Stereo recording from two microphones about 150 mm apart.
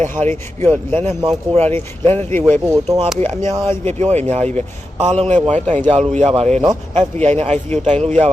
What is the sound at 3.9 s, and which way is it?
Speech, 45° right (ahead or behind).